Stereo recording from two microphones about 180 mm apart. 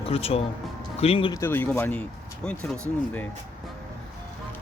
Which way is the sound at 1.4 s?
10° left (ahead or behind).